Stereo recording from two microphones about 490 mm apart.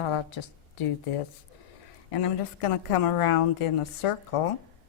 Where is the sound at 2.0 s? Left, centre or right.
Left.